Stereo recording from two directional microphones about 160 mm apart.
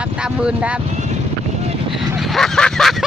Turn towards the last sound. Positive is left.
turn(degrees=0)  # may be behind; listen again after turning